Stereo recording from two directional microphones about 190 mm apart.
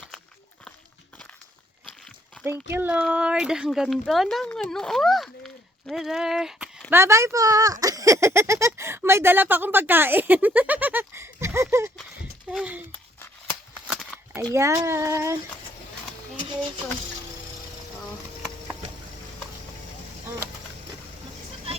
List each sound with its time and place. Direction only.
2.4 s speech: 10° right (ahead or behind)
6.9 s speech: 15° right (ahead or behind)
13.8 s a sound: 5° right (ahead or behind)
14.5 s speech: 15° right (ahead or behind)